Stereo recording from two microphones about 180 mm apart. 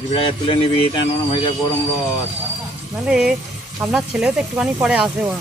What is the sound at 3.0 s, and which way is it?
Speech, 5° right (ahead or behind).